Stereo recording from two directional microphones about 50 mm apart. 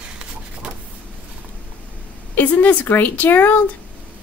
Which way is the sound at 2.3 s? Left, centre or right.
Left.